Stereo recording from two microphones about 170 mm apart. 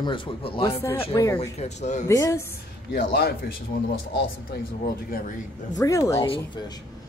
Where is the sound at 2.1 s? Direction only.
20° left (ahead or behind).